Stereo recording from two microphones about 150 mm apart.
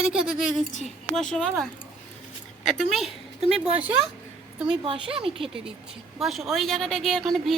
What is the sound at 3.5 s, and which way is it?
Speech, 40° right (ahead or behind).